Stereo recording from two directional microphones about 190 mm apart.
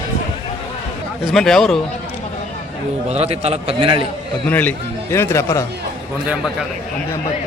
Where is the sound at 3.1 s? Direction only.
35° right (ahead or behind).